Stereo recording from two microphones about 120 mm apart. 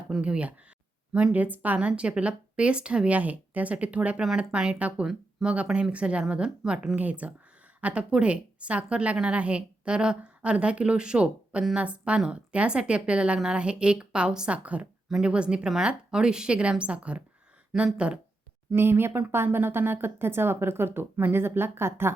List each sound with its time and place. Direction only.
0.1 s a woman's voice: 10° right (ahead or behind)